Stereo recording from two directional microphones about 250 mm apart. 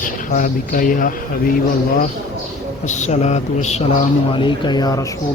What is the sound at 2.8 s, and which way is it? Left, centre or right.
Speech, left.